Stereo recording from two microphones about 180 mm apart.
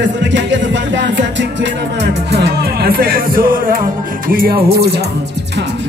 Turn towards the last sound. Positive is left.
turn(degrees=-60)  # may be behind; listen again after turning